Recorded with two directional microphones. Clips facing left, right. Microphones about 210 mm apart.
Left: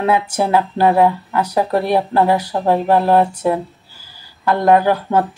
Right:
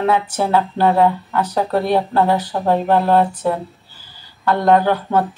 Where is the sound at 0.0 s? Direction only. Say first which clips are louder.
Left 1 dB; 10° left (ahead or behind).